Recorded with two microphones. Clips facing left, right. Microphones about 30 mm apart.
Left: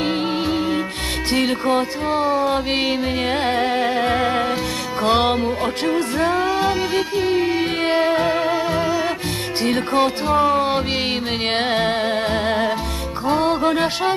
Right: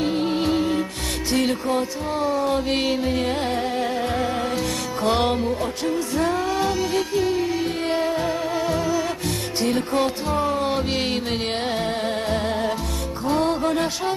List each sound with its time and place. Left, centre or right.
0.0 s music: left
0.3 s music: centre
1.4 s music: left
5.8 s music: left
6.1 s music: left
8.5 s music: left
11.5 s music: left
12.0 s music: left